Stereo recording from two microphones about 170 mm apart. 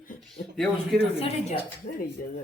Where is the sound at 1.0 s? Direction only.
35° left (ahead or behind).